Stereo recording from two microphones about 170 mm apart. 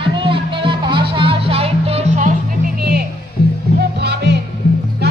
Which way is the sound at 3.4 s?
65° left (ahead or behind).